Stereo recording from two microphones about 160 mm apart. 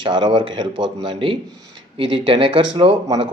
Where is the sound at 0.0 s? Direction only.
30° right (ahead or behind).